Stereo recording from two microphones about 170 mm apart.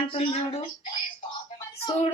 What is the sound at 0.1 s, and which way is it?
Speech, 30° left (ahead or behind).